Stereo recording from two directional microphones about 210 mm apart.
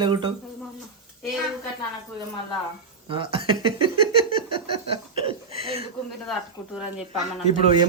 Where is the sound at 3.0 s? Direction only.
25° right (ahead or behind).